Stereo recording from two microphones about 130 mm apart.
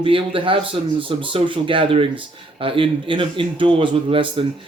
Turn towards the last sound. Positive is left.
turn(degrees=-40)  # may be behind; listen again after turning